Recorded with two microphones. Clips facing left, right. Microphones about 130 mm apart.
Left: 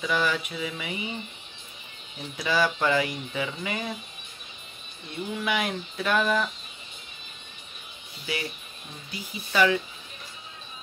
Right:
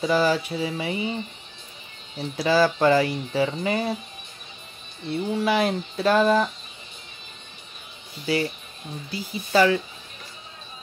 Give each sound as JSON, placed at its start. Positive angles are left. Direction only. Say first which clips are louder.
{"t": 0.0, "sound": "speech", "louder": "right 6 dB", "side_deg": -35}
{"t": 2.1, "sound": "speech", "louder": "right 6 dB", "side_deg": -35}
{"t": 5.0, "sound": "speech", "louder": "right 7 dB", "side_deg": -35}
{"t": 8.3, "sound": "speech", "louder": "right 8 dB", "side_deg": -30}